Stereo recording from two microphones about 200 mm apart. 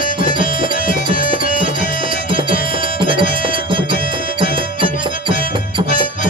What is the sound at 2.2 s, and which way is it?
Music, 25° right (ahead or behind).